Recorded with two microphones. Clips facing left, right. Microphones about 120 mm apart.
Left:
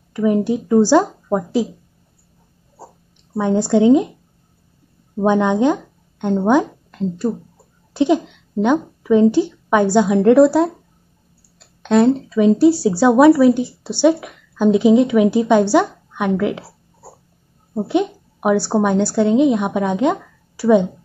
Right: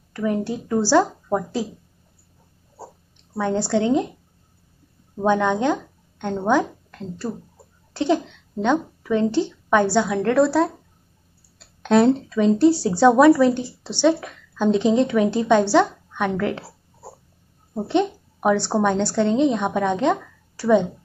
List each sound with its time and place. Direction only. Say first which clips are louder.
0.1 s a woman's voice: left 7 dB; 15° left (ahead or behind)
3.3 s a woman's voice: left 6 dB; 15° left (ahead or behind)
5.1 s speech: left 4 dB; 15° left (ahead or behind)
11.6 s a woman's voice: left 2 dB; centre (ahead or behind)
17.7 s a woman's voice: left 2 dB; 10° left (ahead or behind)